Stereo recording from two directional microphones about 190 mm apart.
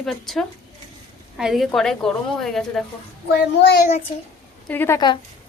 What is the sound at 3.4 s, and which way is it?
Speech, 60° left (ahead or behind).